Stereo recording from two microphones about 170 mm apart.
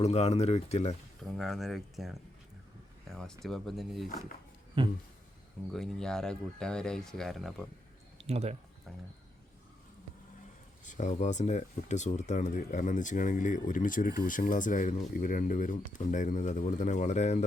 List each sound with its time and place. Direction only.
0.0 s speech: 40° left (ahead or behind)
1.2 s speech: centre (ahead or behind)
4.8 s speech: 30° right (ahead or behind)
5.7 s speech: 5° left (ahead or behind)
8.2 s speech: 40° right (ahead or behind)
10.8 s speech: 45° left (ahead or behind)